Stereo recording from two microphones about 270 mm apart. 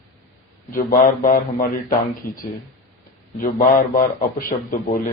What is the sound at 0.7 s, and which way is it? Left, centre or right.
Speech, left.